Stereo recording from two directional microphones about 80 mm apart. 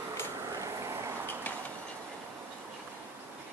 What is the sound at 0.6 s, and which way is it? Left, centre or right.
Vehicle, right.